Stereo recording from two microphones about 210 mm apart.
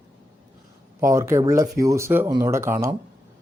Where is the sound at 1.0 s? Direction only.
15° right (ahead or behind).